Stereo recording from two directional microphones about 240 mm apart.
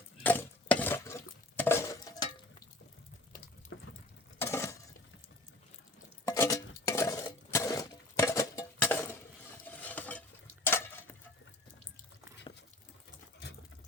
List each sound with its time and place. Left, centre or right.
0.2 s dishes: centre
3.7 s water: left
4.4 s dishes: centre
6.2 s dishes: centre
9.6 s stir: centre